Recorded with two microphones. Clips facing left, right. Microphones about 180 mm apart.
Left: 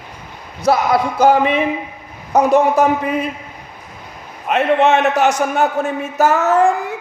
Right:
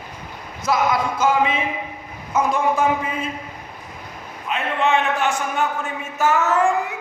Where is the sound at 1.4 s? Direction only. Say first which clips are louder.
Left 5 dB; 65° left (ahead or behind).